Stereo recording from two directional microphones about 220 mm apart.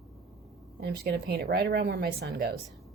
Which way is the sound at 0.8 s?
45° right (ahead or behind).